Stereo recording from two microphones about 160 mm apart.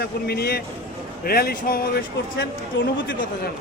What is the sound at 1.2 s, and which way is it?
Speech, 70° left (ahead or behind).